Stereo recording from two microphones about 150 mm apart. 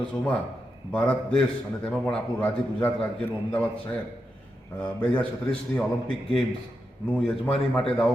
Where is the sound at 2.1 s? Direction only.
10° left (ahead or behind).